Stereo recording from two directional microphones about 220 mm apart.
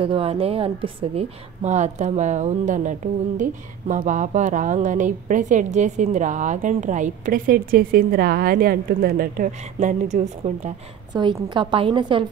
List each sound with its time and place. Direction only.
0.0 s a woman's voice: 25° right (ahead or behind)
11.1 s a woman's voice: 20° right (ahead or behind)